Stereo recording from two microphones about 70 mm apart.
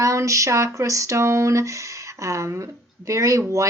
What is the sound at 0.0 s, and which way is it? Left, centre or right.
Speech, right.